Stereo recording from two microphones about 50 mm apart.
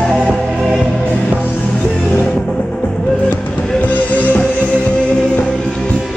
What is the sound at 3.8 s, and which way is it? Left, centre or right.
Music, left.